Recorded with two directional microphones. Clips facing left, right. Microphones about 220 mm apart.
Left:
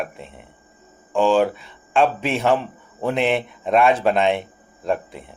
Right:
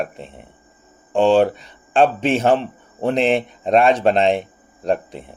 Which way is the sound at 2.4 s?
30° right (ahead or behind).